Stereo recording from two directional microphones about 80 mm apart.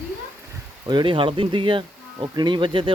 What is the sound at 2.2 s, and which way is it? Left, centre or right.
Speech, right.